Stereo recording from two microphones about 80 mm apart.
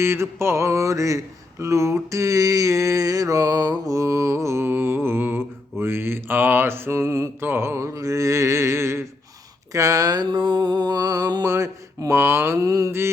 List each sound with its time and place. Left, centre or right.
0.0 s music: right
5.7 s mantra: right
7.9 s music: right
9.7 s speech: right
10.3 s music: right
11.4 s music: right